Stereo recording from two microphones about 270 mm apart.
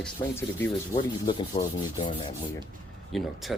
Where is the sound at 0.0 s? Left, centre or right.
Centre.